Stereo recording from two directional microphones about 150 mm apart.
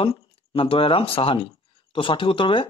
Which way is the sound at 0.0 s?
40° left (ahead or behind).